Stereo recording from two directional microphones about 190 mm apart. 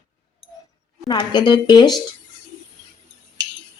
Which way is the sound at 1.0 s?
20° left (ahead or behind).